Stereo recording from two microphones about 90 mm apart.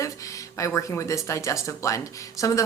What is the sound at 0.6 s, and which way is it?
Speech, 35° left (ahead or behind).